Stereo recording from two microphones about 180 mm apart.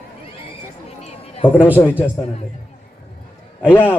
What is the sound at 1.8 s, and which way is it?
Speech, 10° left (ahead or behind).